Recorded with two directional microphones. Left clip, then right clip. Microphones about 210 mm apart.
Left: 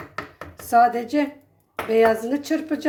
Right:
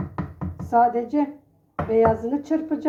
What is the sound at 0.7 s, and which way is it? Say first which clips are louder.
Speech: left 2 dB; 30° left (ahead or behind).